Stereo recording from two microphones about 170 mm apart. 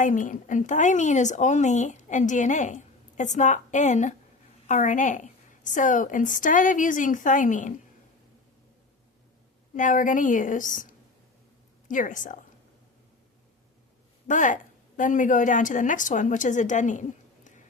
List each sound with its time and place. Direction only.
0.0 s a woman's voice: 50° left (ahead or behind)
9.7 s a woman's voice: 50° left (ahead or behind)
14.3 s a woman's voice: 50° left (ahead or behind)